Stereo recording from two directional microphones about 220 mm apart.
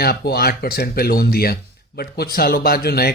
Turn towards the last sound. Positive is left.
turn(degrees=45)  # may be behind; listen again after turning